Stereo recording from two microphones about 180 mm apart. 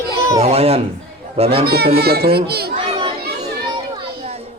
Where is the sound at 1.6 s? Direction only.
60° right (ahead or behind).